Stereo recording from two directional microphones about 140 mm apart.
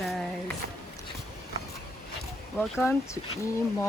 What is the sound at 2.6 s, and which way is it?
Speech, 15° left (ahead or behind).